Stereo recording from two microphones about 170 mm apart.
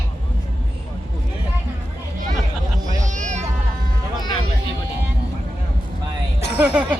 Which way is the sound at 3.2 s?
45° right (ahead or behind).